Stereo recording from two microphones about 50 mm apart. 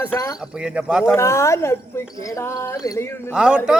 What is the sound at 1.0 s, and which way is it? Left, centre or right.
Speech, left.